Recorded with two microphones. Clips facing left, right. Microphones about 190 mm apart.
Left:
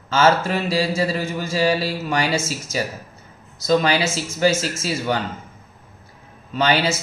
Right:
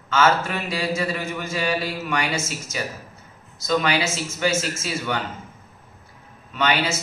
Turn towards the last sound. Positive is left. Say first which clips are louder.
# left 3 dB
turn(degrees=35)  # may be behind; listen again after turning